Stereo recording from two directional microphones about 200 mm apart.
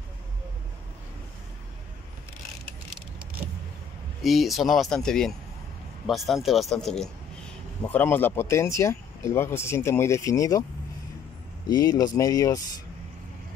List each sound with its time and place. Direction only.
4.2 s speech: centre (ahead or behind); by 10.6 s 15° left (ahead or behind)
11.6 s speech: 20° left (ahead or behind)